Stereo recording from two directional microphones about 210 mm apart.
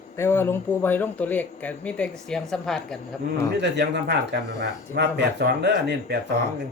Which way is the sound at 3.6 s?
55° right (ahead or behind).